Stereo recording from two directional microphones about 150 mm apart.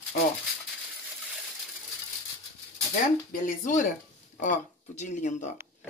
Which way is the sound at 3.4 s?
60° left (ahead or behind).